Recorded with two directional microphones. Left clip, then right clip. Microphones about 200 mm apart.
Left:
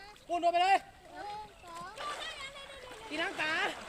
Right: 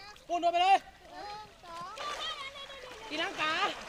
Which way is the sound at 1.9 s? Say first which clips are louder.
Right 1 dB; 20° right (ahead or behind).